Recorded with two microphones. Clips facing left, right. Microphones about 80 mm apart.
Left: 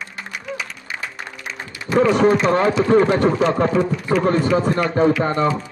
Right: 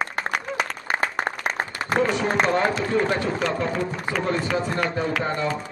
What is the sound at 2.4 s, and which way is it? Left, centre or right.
Speech, left.